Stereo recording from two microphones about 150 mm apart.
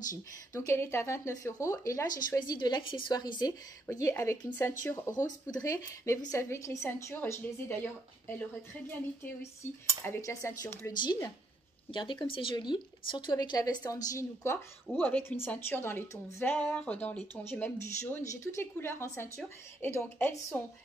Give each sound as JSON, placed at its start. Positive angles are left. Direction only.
{"t": 0.1, "sound": "speech", "side_deg": 20}